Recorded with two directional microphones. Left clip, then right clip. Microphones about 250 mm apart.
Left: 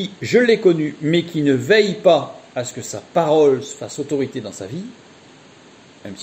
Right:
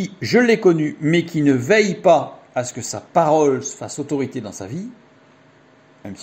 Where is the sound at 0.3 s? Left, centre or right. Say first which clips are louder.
Left 1 dB; right.